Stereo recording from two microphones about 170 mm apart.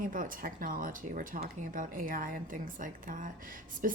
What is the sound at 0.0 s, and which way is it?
Speech, 55° right (ahead or behind).